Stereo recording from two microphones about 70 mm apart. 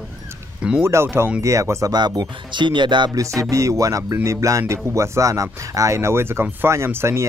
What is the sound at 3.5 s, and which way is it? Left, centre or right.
Speech, right.